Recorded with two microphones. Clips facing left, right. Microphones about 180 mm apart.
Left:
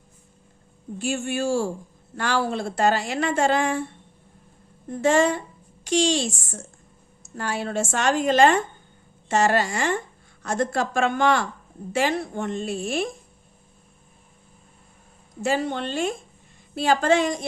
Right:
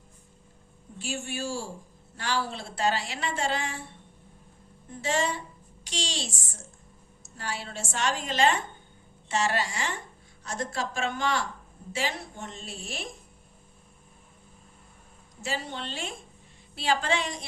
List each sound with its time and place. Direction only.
0.9 s a woman's voice: 55° left (ahead or behind)
4.9 s a woman's voice: 50° left (ahead or behind)
15.4 s speech: 50° left (ahead or behind)